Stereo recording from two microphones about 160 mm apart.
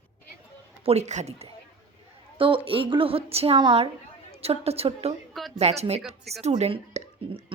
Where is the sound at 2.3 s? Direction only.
35° right (ahead or behind).